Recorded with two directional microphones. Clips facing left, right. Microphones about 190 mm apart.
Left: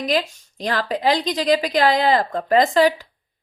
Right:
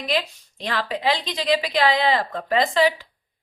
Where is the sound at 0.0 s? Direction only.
40° left (ahead or behind).